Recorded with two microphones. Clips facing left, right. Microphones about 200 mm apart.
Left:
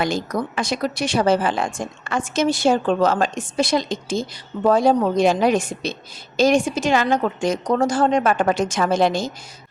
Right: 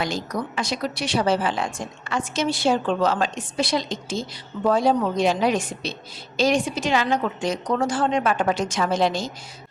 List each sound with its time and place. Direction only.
0.0 s a woman's voice: 50° left (ahead or behind)